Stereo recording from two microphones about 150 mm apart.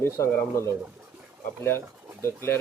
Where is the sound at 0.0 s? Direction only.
15° left (ahead or behind).